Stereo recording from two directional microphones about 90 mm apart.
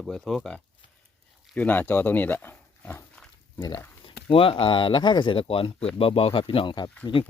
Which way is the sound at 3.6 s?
45° left (ahead or behind).